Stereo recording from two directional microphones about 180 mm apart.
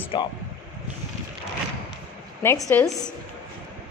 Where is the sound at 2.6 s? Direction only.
5° left (ahead or behind).